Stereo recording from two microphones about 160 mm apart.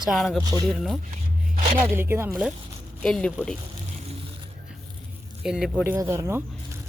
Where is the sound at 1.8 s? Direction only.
15° right (ahead or behind).